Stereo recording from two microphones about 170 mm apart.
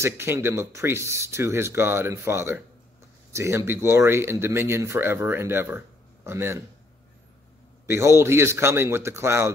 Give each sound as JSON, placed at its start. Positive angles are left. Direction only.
{"t": 0.0, "sound": "speech", "side_deg": -15}
{"t": 7.8, "sound": "speech", "side_deg": -15}